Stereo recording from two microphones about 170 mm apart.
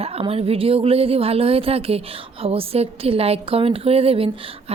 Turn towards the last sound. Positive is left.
turn(degrees=-35)  # may be behind; listen again after turning